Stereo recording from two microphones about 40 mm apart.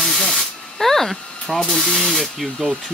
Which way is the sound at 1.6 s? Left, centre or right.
Centre.